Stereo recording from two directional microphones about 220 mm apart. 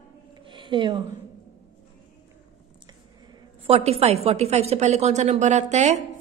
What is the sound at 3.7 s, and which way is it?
A woman's voice, 30° right (ahead or behind).